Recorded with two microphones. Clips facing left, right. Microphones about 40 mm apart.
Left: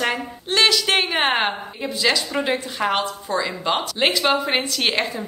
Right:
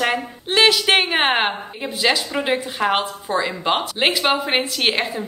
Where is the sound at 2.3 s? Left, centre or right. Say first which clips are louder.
Right 1 dB; centre.